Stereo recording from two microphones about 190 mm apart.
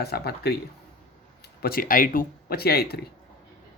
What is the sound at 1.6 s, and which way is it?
Speech, 50° left (ahead or behind).